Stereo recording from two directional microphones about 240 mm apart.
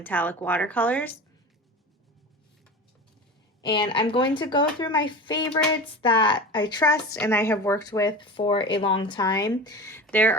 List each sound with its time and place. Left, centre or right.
0.0 s a woman's voice: centre
3.6 s a woman's voice: centre